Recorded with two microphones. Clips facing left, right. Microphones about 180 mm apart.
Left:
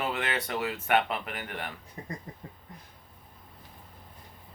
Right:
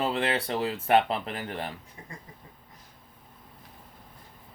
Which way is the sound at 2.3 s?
50° left (ahead or behind).